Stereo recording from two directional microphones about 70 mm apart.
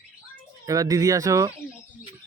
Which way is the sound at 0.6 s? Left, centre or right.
Right.